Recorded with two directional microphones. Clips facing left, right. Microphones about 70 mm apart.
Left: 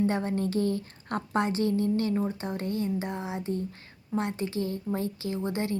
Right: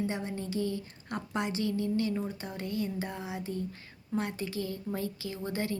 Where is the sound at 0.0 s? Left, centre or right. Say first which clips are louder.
Left 7 dB; left.